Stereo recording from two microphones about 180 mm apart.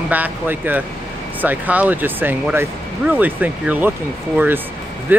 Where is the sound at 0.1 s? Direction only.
10° right (ahead or behind).